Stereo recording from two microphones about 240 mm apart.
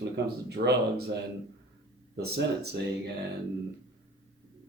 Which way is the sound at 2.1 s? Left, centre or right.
Right.